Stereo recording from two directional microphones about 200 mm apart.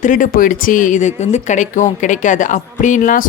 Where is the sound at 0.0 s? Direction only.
40° left (ahead or behind).